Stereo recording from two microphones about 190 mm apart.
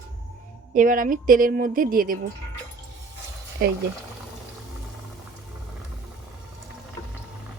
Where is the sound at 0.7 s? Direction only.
45° right (ahead or behind).